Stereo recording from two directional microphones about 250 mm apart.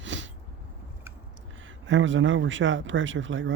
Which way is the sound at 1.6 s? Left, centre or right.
Right.